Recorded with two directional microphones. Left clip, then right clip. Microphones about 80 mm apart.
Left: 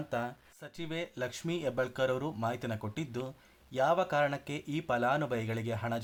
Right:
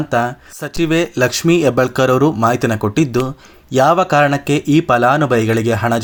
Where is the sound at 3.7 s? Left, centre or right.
Right.